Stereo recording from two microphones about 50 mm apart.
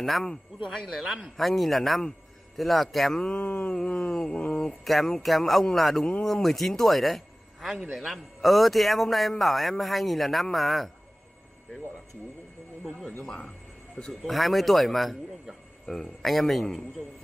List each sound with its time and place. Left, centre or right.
0.0 s a man's voice: centre
3.3 s mantra: left
3.7 s a sound: centre
4.8 s a man's voice: centre
13.2 s speech: centre
14.2 s a man's voice: centre